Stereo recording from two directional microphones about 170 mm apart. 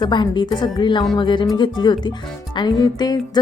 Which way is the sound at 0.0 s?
25° left (ahead or behind).